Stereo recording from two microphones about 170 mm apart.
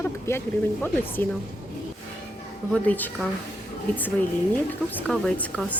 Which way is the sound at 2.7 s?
10° left (ahead or behind).